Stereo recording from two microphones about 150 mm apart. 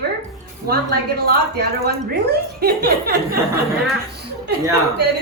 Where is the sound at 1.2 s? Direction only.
90° right.